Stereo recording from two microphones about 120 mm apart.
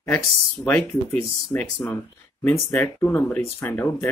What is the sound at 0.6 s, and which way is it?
Speech, 15° left (ahead or behind).